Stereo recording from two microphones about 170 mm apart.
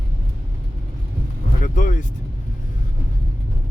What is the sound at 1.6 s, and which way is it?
Speech, 50° left (ahead or behind).